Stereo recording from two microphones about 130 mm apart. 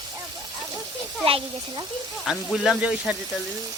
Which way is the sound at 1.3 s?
45° right (ahead or behind).